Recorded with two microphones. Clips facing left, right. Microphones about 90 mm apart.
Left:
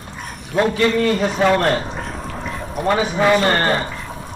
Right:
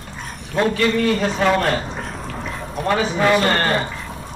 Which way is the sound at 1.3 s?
5° left (ahead or behind).